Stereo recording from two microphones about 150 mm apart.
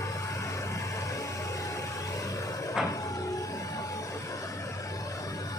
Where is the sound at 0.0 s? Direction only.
20° left (ahead or behind).